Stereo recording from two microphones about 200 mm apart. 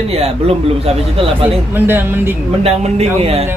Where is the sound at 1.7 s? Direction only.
10° right (ahead or behind).